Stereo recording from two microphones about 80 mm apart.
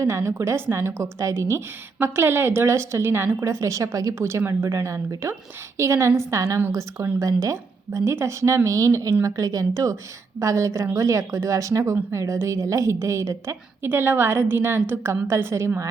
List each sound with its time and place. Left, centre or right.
0.0 s a woman's voice: right
7.2 s a woman's voice: right